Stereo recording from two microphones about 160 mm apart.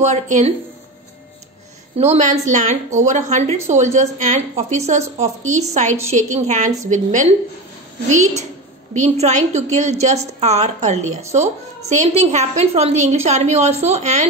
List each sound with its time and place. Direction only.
0.0 s a woman's voice: 45° right (ahead or behind)
2.0 s a woman's voice: 45° right (ahead or behind)